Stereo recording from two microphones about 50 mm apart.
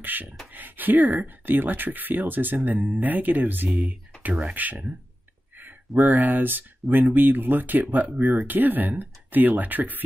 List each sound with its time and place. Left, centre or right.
0.0 s speech: right